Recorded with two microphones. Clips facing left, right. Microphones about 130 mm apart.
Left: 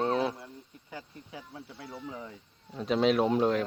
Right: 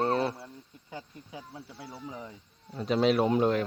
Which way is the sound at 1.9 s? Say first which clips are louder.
Left 1 dB; 10° right (ahead or behind).